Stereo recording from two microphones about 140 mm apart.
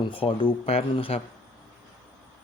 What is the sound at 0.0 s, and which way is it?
Speech, 40° left (ahead or behind).